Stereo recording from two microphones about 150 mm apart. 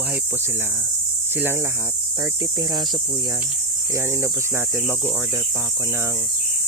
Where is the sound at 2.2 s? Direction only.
25° right (ahead or behind).